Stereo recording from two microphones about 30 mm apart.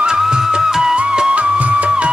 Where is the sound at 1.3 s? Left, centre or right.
Right.